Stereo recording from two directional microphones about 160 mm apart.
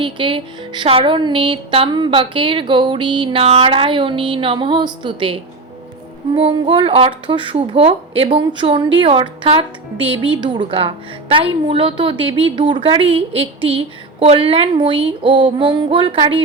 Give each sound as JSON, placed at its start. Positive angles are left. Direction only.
{"t": 0.0, "sound": "speech", "side_deg": -30}